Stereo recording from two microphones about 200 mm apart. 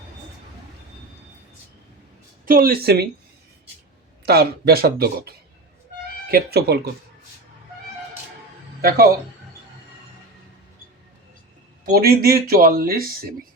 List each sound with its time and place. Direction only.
2.5 s speech: 45° right (ahead or behind)
4.3 s speech: 50° right (ahead or behind)
8.8 s speech: 50° right (ahead or behind)
11.9 s speech: 50° right (ahead or behind)